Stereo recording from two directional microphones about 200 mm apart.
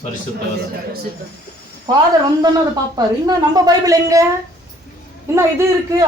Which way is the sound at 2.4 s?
20° right (ahead or behind).